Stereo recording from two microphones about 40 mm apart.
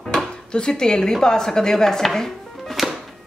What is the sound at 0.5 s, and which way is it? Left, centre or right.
Speech, centre.